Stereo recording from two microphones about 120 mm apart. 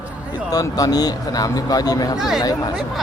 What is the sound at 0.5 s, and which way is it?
Speech, 30° left (ahead or behind).